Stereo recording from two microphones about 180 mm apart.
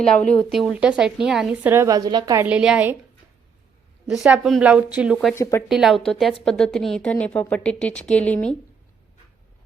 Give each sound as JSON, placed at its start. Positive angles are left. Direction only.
{"t": 0.0, "sound": "speech", "side_deg": 5}
{"t": 2.5, "sound": "a woman's voice", "side_deg": -5}
{"t": 4.1, "sound": "speech", "side_deg": 0}
{"t": 5.3, "sound": "speech", "side_deg": 15}
{"t": 5.6, "sound": "speech", "side_deg": 0}